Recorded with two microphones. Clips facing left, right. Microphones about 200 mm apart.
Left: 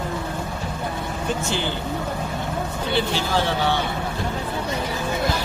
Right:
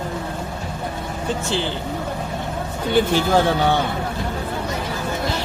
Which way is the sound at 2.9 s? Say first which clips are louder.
Right 7 dB; 50° right (ahead or behind).